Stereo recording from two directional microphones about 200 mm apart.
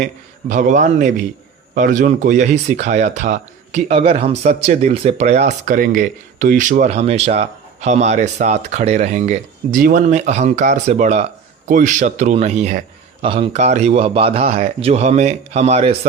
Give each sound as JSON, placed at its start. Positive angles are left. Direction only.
{"t": 0.0, "sound": "speech", "side_deg": -40}